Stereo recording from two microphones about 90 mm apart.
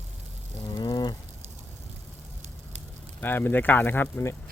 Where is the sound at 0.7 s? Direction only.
50° left (ahead or behind).